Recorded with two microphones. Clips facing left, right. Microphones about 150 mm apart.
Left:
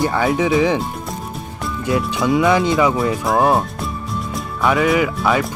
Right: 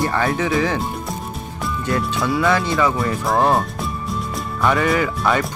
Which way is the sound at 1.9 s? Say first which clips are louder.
Left 4 dB; 15° left (ahead or behind).